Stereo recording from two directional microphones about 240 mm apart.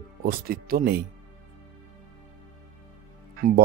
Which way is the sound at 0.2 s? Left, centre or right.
Right.